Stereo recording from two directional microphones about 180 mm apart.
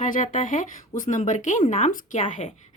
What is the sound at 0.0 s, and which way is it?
A woman's voice, 45° left (ahead or behind).